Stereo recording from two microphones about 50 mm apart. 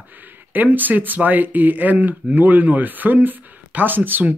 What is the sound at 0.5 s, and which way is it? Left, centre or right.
Speech, right.